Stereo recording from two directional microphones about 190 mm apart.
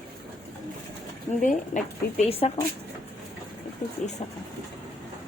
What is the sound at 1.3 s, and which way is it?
Speech, 40° left (ahead or behind).